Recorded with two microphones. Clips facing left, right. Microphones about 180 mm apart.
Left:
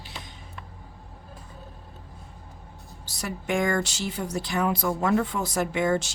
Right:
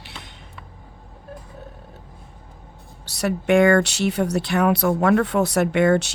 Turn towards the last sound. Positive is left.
turn(degrees=-70)  # may be behind; listen again after turning